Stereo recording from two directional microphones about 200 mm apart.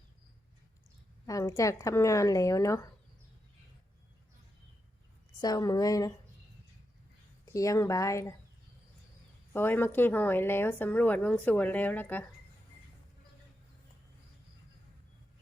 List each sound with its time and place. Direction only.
1.3 s a woman's voice: 15° left (ahead or behind)
5.4 s a woman's voice: 20° left (ahead or behind)
7.4 s a woman's voice: 15° left (ahead or behind)
9.5 s a woman's voice: 10° left (ahead or behind)